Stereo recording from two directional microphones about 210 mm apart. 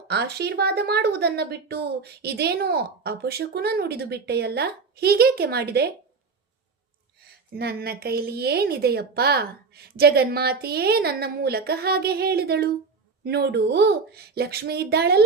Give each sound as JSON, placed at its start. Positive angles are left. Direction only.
{"t": 0.1, "sound": "a woman's voice", "side_deg": -50}
{"t": 7.2, "sound": "a woman's voice", "side_deg": -50}